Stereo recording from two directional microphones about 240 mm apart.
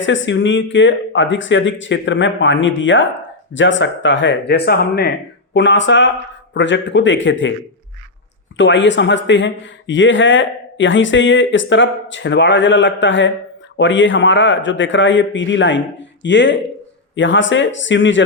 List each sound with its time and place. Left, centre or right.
0.0 s speech: left
8.5 s speech: left